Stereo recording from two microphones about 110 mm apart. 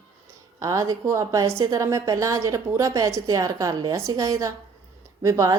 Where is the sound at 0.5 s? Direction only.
30° right (ahead or behind).